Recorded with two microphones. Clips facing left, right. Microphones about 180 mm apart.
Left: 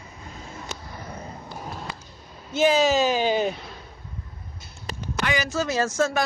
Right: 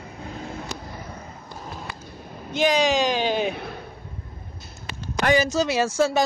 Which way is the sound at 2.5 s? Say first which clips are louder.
Left 1 dB; 5° left (ahead or behind).